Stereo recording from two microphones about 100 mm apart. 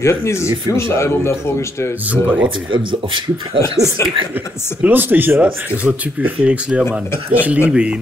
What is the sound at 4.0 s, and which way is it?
Speech, 30° left (ahead or behind).